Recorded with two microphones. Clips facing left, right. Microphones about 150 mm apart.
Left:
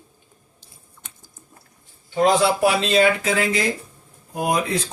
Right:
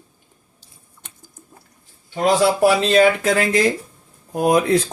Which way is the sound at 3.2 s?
55° right (ahead or behind).